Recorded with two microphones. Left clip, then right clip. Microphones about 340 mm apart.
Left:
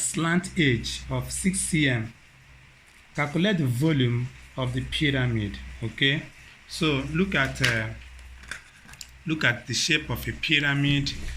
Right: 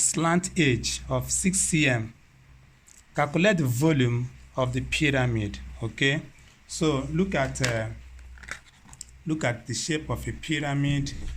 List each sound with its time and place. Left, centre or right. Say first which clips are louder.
0.0 s speech: right 2 dB; right
3.2 s speech: right 3 dB; right
9.0 s speech: left 3 dB; right